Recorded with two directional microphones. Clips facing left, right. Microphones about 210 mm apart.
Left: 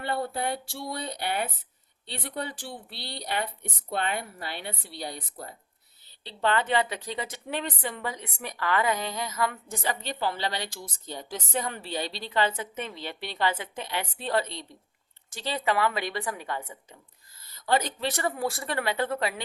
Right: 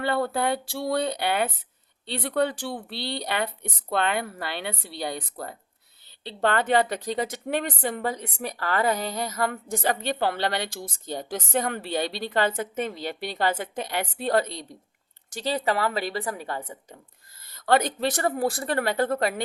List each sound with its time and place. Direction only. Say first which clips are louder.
0.0 s a woman's voice: right 5 dB; 80° right
6.2 s a woman's voice: right 3 dB; 50° right (ahead or behind); by 17.0 s 35° right (ahead or behind)
17.5 s a woman's voice: right 4 dB; 60° right (ahead or behind)